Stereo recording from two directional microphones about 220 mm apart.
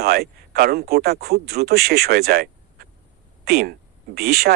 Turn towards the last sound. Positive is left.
turn(degrees=-45)  # may be behind; listen again after turning